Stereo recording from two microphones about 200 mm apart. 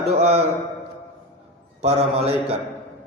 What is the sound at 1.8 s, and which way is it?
Speech, 30° right (ahead or behind).